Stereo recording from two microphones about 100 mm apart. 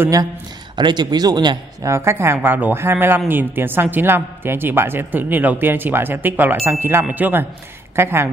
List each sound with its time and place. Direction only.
0.7 s speech: 45° right (ahead or behind)
1.8 s a woman's voice: 30° right (ahead or behind)